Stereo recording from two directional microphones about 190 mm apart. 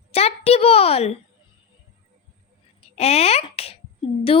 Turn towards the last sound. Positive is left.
turn(degrees=30)  # may be behind; listen again after turning